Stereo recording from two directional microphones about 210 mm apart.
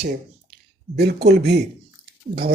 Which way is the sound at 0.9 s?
50° right (ahead or behind).